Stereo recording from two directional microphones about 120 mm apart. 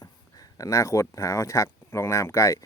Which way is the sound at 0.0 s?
30° left (ahead or behind).